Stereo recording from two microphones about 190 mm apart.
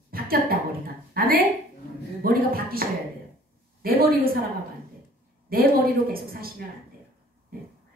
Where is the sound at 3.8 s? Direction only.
50° right (ahead or behind).